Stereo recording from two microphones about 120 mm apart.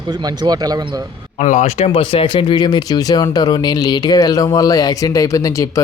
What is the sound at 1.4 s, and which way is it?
Speech, 80° left.